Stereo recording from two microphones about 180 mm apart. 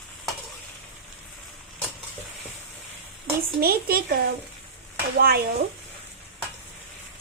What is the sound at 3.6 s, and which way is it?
Speech, 55° right (ahead or behind).